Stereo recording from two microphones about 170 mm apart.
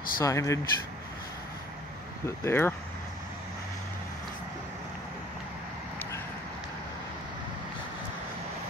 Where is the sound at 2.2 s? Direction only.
15° left (ahead or behind).